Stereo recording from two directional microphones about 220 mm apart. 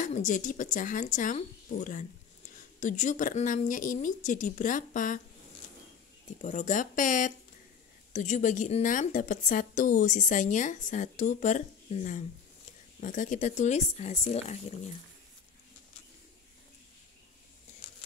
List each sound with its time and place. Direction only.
0.0 s a woman's voice: 35° left (ahead or behind)
6.4 s a woman's voice: 30° left (ahead or behind)